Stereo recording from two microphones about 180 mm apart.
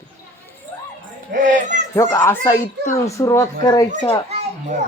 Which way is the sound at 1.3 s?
45° right (ahead or behind).